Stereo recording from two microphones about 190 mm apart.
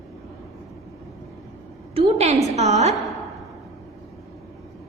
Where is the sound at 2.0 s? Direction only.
35° right (ahead or behind).